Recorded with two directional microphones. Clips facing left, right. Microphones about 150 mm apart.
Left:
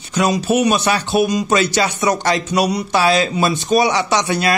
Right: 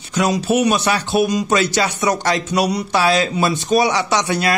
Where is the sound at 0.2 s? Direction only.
20° left (ahead or behind).